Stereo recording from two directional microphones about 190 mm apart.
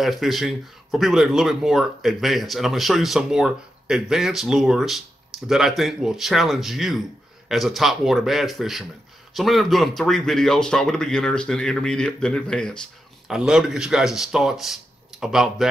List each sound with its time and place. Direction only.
0.0 s speech: centre (ahead or behind)